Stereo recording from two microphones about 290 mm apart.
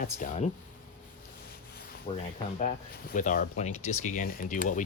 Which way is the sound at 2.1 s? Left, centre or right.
Left.